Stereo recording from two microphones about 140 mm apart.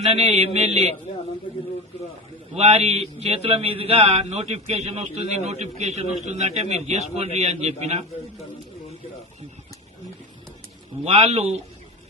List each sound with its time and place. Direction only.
0.0 s a man's voice: 50° right (ahead or behind)
2.6 s a man's voice: 50° right (ahead or behind)
11.0 s a man's voice: 45° right (ahead or behind)